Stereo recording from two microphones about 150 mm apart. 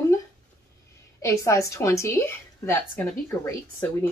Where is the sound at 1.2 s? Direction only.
20° left (ahead or behind).